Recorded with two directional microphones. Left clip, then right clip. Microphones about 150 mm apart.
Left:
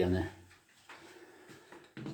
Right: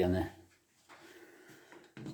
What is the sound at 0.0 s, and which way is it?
Speech, 40° right (ahead or behind).